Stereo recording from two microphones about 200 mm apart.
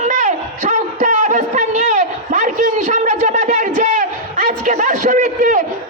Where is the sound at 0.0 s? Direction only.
35° right (ahead or behind).